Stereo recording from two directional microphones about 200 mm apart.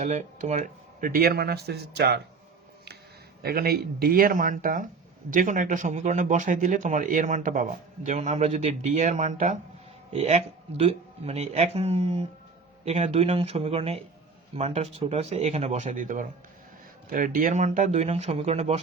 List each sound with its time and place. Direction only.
0.0 s a man's voice: 35° right (ahead or behind)
1.0 s speech: 50° right (ahead or behind)
3.4 s a man's voice: 50° right (ahead or behind); by 18.8 s 30° right (ahead or behind)